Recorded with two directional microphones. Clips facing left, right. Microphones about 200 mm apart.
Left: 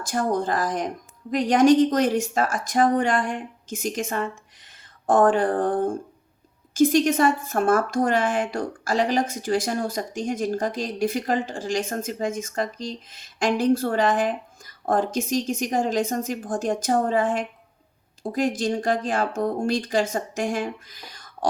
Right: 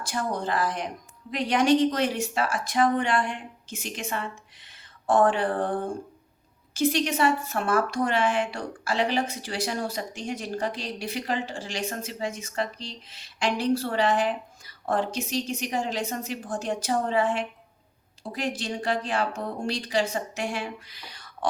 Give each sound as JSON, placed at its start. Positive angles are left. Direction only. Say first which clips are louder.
{"t": 0.1, "sound": "speech", "louder": "left 5 dB", "side_deg": 45}